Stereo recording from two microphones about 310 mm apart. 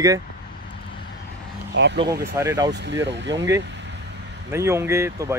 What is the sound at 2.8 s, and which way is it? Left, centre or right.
Speech, right.